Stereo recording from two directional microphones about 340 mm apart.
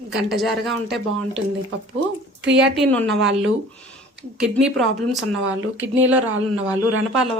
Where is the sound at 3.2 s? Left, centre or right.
Right.